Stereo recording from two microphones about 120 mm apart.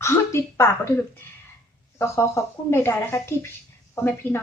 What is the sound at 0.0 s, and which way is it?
Speech, 25° left (ahead or behind).